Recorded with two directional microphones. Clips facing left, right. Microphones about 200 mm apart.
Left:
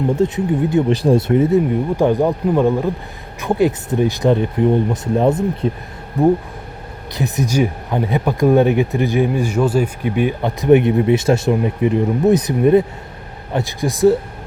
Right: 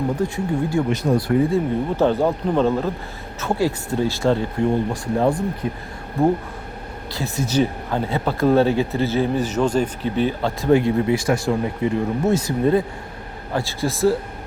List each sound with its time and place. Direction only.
0.2 s speech: 20° left (ahead or behind)
0.9 s speech: 30° left (ahead or behind)
7.1 s speech: 20° left (ahead or behind)